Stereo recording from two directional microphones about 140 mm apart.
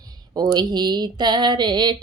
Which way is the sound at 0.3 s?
30° right (ahead or behind).